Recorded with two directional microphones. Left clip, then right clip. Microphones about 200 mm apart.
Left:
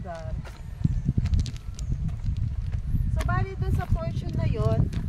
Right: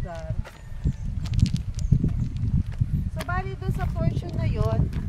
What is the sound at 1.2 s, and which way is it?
Horse, 15° right (ahead or behind).